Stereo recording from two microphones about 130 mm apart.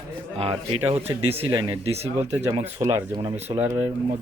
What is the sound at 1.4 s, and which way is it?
Speech, 35° right (ahead or behind).